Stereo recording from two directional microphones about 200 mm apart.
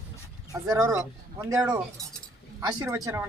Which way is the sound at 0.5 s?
15° right (ahead or behind).